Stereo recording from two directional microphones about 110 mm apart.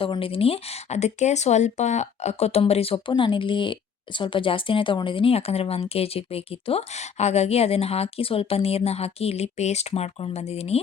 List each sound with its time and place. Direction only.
0.0 s speech: 55° left (ahead or behind)
3.1 s a woman's voice: 50° left (ahead or behind); by 10.8 s 70° left (ahead or behind)